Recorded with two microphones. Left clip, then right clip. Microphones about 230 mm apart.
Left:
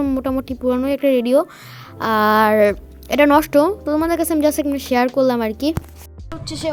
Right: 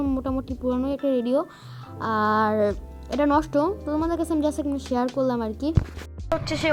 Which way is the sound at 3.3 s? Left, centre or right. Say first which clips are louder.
Left 8 dB; left.